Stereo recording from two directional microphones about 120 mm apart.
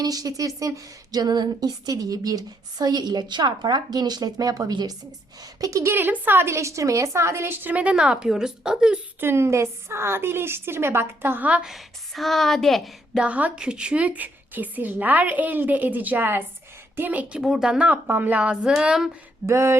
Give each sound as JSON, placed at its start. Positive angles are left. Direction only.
{"t": 0.0, "sound": "a woman's voice", "side_deg": -30}
{"t": 9.2, "sound": "a woman's voice", "side_deg": -20}
{"t": 13.2, "sound": "a woman's voice", "side_deg": -10}
{"t": 18.7, "sound": "a sound", "side_deg": -5}
{"t": 19.5, "sound": "a woman's voice", "side_deg": -25}